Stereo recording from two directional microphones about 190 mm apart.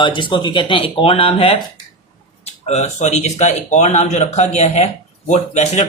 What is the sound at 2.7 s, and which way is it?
Speech, 35° left (ahead or behind).